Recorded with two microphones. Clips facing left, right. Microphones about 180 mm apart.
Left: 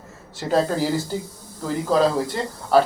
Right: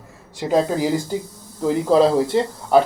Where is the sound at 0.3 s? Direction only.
10° right (ahead or behind).